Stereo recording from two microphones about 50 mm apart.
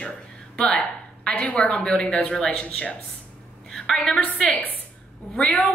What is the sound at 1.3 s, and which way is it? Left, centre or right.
Speech, left.